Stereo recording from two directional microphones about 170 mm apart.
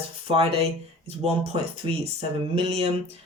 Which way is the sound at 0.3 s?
35° right (ahead or behind).